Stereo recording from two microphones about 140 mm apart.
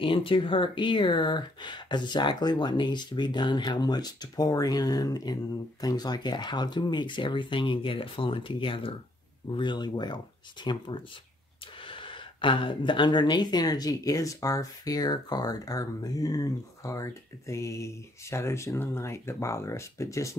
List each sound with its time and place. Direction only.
0.0 s speech: 40° left (ahead or behind); by 20.3 s 20° left (ahead or behind)